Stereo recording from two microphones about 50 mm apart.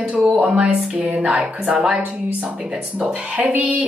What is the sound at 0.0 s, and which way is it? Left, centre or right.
Speech, right.